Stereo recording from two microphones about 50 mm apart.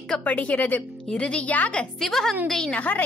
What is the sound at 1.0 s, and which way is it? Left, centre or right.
Speech, left.